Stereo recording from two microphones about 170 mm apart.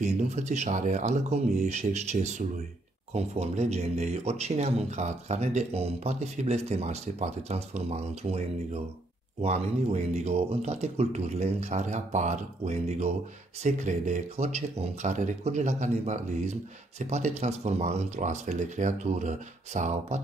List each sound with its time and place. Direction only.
0.0 s speech: 40° right (ahead or behind)